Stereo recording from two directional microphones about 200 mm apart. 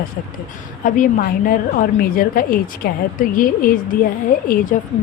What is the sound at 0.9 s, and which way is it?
A woman's voice, 45° left (ahead or behind).